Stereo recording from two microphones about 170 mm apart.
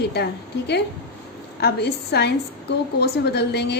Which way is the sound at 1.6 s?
70° left (ahead or behind).